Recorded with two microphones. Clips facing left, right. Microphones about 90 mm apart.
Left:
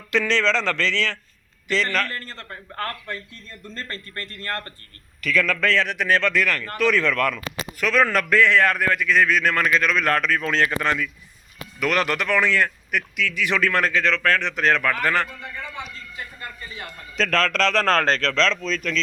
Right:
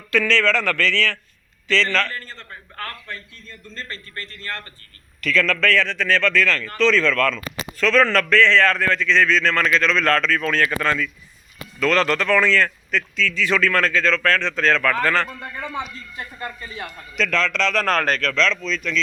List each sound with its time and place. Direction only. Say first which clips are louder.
0.1 s a man's voice: right 2 dB; 20° left (ahead or behind)
3.8 s speech: even; 45° left (ahead or behind)
5.2 s a man's voice: right 2 dB; 15° left (ahead or behind)
17.2 s a man's voice: left 1 dB; 40° left (ahead or behind)